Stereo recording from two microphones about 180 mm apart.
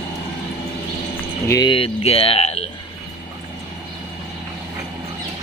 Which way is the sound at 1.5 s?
25° left (ahead or behind).